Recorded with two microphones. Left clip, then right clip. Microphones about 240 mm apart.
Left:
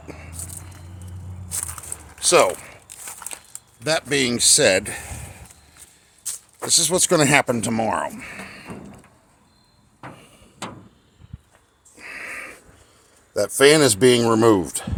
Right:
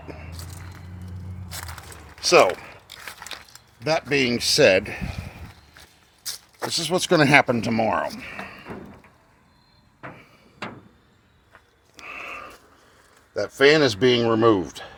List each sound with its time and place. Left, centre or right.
0.0 s a sound: centre
2.2 s speech: centre
3.8 s speech: centre
6.2 s a sound: centre
6.7 s speech: centre
13.6 s speech: left
14.6 s speech: left